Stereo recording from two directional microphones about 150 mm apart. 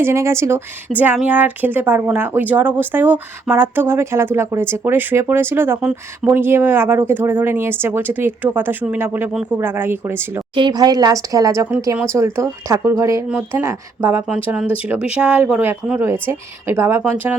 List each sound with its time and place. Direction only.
0.0 s speech: 15° right (ahead or behind)
10.5 s speech: 30° right (ahead or behind)